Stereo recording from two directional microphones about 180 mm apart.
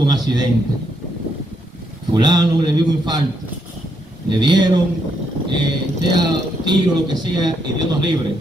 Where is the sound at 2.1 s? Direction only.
25° right (ahead or behind).